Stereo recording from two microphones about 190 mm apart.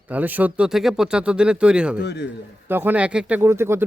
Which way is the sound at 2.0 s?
60° left (ahead or behind).